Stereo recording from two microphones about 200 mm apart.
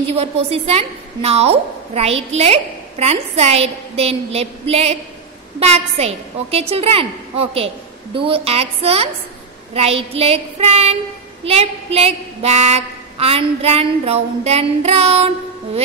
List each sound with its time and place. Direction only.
0.1 s a woman's voice: 30° right (ahead or behind)
9.8 s child singing: 30° right (ahead or behind)
11.4 s a woman's voice: 30° right (ahead or behind)